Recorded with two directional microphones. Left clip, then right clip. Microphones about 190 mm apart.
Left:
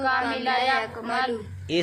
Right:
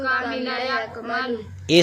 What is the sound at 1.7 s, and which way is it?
Speech, 35° right (ahead or behind).